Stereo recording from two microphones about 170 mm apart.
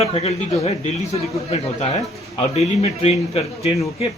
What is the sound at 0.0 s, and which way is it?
A man's voice, 35° left (ahead or behind).